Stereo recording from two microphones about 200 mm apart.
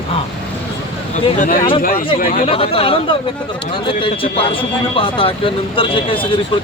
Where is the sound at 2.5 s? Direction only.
30° left (ahead or behind).